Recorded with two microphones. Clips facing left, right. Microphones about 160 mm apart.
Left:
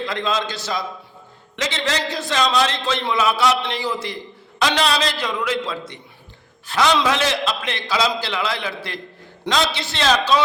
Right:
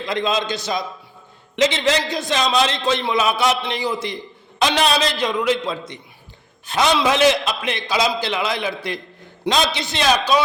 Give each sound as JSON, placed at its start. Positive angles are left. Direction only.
{"t": 0.0, "sound": "a man's voice", "side_deg": -20}